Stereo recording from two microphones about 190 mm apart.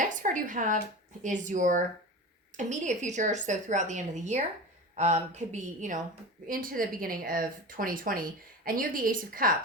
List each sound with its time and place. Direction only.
0.1 s a woman's voice: 40° right (ahead or behind)